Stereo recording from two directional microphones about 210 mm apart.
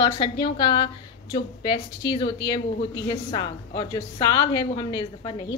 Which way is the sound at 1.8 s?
50° left (ahead or behind).